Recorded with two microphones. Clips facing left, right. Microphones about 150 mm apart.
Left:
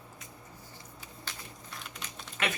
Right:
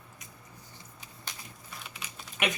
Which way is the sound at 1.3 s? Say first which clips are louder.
Even; 15° right (ahead or behind).